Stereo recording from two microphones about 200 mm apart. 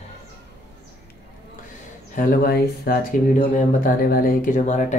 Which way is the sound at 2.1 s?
45° left (ahead or behind).